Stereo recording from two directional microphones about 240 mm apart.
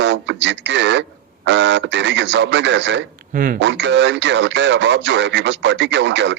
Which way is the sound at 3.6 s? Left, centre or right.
Right.